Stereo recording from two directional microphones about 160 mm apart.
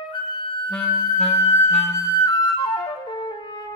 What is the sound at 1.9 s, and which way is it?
Flute, 20° left (ahead or behind).